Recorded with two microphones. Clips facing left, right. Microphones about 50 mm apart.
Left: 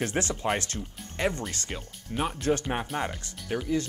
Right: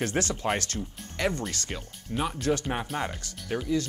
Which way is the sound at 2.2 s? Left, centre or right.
Left.